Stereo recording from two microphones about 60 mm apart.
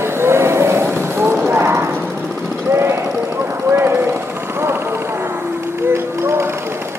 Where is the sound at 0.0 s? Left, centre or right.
Right.